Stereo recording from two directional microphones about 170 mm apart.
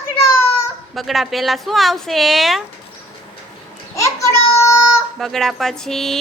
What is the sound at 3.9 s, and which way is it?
Child singing, 20° left (ahead or behind).